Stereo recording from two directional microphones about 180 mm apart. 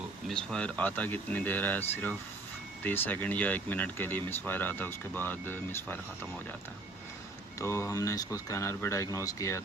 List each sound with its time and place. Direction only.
0.3 s speech: 5° left (ahead or behind)
2.8 s speech: 10° left (ahead or behind)
7.6 s speech: 15° left (ahead or behind)